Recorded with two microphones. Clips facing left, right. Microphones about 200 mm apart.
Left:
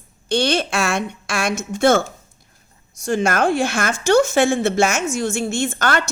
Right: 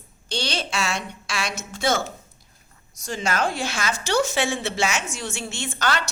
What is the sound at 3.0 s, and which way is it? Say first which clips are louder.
A woman's voice: left 7 dB; 50° left (ahead or behind).